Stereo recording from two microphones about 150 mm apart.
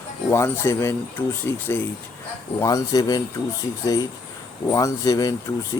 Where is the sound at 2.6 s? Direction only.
25° left (ahead or behind).